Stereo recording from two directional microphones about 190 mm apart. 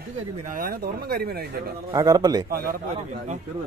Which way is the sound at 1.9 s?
20° right (ahead or behind).